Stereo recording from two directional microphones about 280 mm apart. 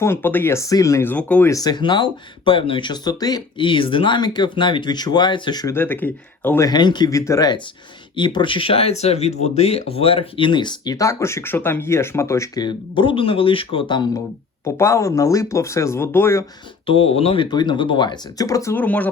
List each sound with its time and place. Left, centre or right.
0.0 s speech: centre
16.8 s speech: left